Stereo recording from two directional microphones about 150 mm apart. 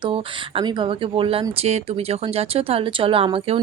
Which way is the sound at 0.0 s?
35° right (ahead or behind).